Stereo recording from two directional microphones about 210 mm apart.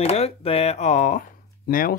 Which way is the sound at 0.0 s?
30° left (ahead or behind).